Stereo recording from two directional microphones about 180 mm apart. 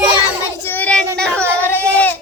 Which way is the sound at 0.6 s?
10° left (ahead or behind).